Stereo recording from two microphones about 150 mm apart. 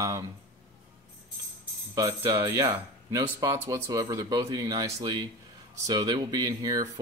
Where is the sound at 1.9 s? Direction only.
20° right (ahead or behind).